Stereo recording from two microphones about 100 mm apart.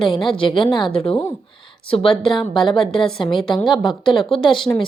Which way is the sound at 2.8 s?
5° left (ahead or behind).